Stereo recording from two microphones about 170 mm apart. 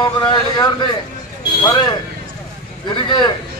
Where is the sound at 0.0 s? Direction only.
25° left (ahead or behind).